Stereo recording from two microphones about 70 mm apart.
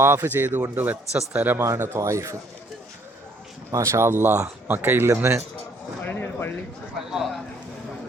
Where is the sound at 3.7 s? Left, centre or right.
Right.